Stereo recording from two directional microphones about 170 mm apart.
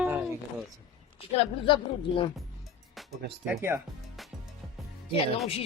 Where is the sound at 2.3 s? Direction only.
Centre (ahead or behind).